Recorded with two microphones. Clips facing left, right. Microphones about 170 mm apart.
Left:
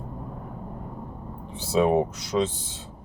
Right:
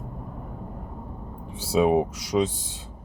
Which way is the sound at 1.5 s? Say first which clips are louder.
Right 1 dB; 10° right (ahead or behind).